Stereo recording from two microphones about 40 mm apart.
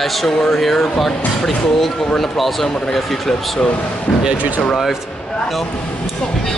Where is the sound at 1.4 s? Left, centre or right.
Centre.